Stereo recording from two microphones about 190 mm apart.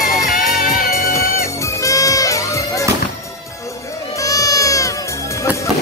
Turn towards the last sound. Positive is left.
turn(degrees=15)  # may be behind; listen again after turning